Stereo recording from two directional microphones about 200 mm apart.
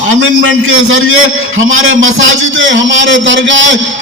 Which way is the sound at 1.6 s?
80° right.